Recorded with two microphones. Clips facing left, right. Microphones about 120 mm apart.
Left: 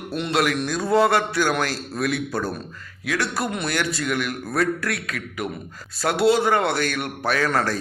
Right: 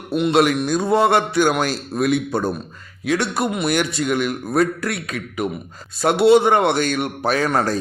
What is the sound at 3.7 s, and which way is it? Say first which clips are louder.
A man's voice: right 4 dB; 25° right (ahead or behind).